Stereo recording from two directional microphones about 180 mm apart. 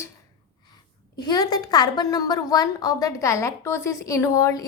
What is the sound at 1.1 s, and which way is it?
A woman's voice, 20° left (ahead or behind).